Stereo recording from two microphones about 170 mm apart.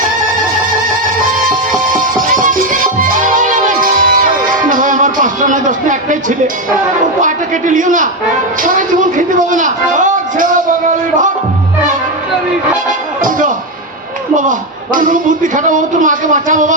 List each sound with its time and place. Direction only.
2.2 s music: 50° right (ahead or behind)
7.2 s a man's voice: 50° right (ahead or behind)
14.9 s a man's voice: 50° right (ahead or behind)